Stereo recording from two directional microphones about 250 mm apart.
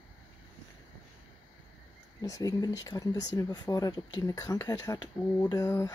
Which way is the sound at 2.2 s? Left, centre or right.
Centre.